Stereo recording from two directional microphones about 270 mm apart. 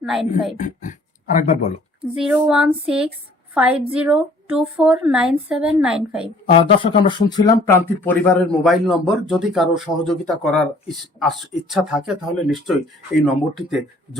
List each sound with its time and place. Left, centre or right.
0.0 s speech: centre
0.5 s speech: left
2.2 s speech: centre
6.7 s speech: centre